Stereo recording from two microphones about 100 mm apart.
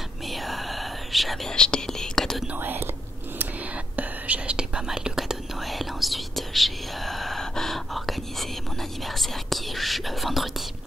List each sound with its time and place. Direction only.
0.3 s whispering: centre (ahead or behind)
2.4 s speech: 20° right (ahead or behind)
3.9 s whispering: 15° right (ahead or behind)